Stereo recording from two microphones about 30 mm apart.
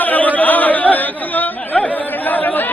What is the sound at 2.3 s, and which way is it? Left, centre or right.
Chatter, left.